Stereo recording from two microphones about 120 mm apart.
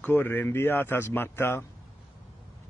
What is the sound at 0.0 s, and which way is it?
Speech, 15° left (ahead or behind).